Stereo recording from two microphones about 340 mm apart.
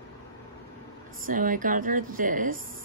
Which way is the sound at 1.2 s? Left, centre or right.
Right.